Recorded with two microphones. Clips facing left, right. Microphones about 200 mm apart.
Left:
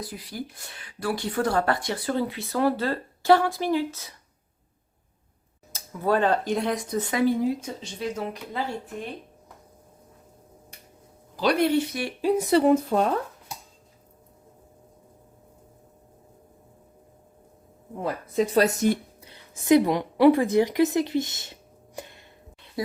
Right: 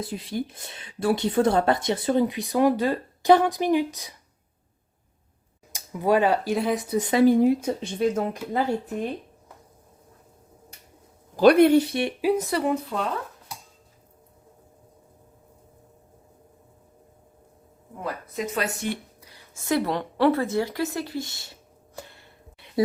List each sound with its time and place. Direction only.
0.0 s speech: 25° right (ahead or behind)
5.7 s speech: 15° right (ahead or behind)
7.3 s a woman's voice: 60° right (ahead or behind)
11.3 s speech: 55° right (ahead or behind)
11.8 s speech: 30° right (ahead or behind)
12.4 s speech: 25° left (ahead or behind)
12.6 s speech: 45° left (ahead or behind)
18.0 s speech: 35° left (ahead or behind)
19.2 s a woman's voice: 20° left (ahead or behind)
22.6 s a sound: 15° right (ahead or behind)